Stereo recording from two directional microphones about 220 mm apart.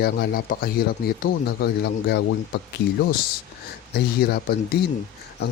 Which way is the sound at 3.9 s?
45° left (ahead or behind).